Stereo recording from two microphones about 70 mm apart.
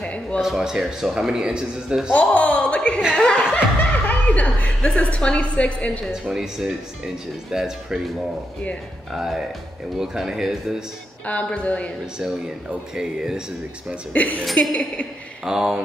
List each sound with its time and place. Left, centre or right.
0.0 s a sound: centre
0.4 s speech: centre
2.1 s chuckle: left
3.2 s speech: centre
3.5 s a woman's voice: left
6.3 s speech: centre
9.1 s speech: centre
11.2 s a woman's voice: centre
12.9 s speech: centre
14.1 s a woman's voice: left
15.4 s speech: centre